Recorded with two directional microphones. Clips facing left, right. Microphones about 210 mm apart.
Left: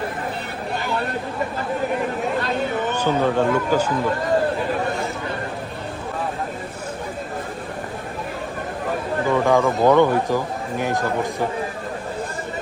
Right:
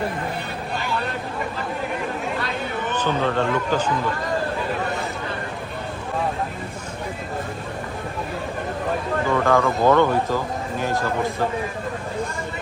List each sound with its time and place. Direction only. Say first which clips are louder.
2.9 s a man's voice: left 1 dB; 10° left (ahead or behind)
9.3 s a man's voice: left 2 dB; 15° left (ahead or behind)